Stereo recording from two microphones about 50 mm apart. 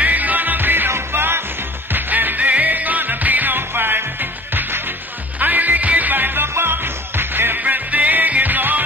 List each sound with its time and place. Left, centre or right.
0.0 s music: right
1.9 s music: right
7.5 s music: right